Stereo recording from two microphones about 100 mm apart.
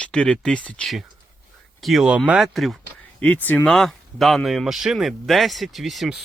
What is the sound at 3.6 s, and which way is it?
Speech, 5° left (ahead or behind).